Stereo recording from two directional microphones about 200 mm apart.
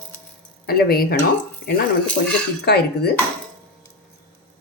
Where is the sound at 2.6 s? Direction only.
50° left (ahead or behind).